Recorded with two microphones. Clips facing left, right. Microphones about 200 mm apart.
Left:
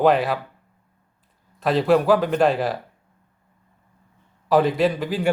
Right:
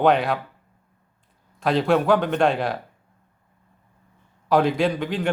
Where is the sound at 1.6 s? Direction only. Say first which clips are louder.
Left 2 dB; centre (ahead or behind).